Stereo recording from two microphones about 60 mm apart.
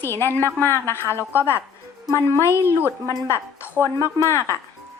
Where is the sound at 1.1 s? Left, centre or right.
Right.